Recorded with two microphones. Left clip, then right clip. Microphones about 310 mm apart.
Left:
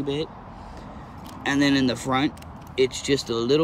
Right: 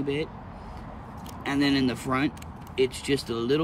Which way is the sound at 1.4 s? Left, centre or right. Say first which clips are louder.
Left 4 dB; centre.